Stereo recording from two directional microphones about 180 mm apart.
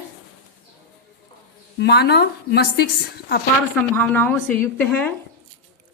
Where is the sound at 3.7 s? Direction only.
5° left (ahead or behind).